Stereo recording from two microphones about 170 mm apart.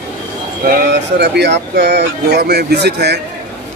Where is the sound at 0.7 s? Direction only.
70° right (ahead or behind).